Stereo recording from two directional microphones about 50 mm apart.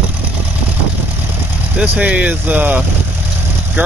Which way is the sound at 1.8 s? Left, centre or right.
Right.